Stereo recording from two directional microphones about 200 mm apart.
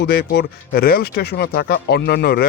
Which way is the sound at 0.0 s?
55° left (ahead or behind).